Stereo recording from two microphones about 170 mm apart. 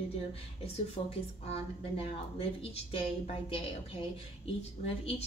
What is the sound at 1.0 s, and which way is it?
A woman's voice, 35° left (ahead or behind).